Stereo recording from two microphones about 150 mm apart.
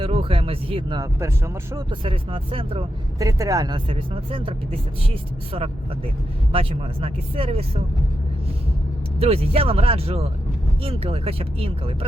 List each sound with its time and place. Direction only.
0.0 s speech: 35° right (ahead or behind)
3.2 s speech: 20° right (ahead or behind)
3.8 s speech: 40° right (ahead or behind)
9.1 s speech: 40° right (ahead or behind)